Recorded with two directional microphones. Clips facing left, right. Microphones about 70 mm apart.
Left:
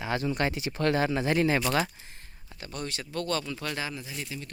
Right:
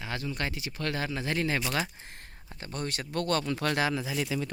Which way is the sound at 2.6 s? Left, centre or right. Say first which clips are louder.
Right 1 dB; right.